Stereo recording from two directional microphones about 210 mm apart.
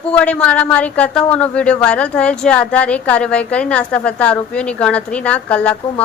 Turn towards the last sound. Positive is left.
turn(degrees=5)  # may be behind; listen again after turning